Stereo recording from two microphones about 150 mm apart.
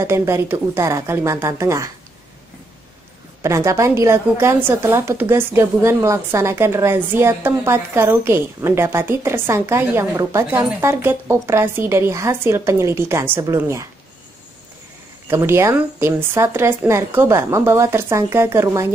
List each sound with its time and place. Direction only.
0.0 s a woman's voice: 20° right (ahead or behind)
3.4 s a woman's voice: 20° right (ahead or behind)
15.2 s a woman's voice: 15° right (ahead or behind)